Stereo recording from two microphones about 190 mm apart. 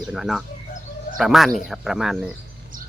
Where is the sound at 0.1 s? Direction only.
Centre (ahead or behind).